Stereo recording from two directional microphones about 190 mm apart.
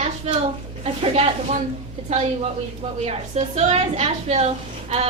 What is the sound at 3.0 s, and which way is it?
A woman's voice, 35° right (ahead or behind).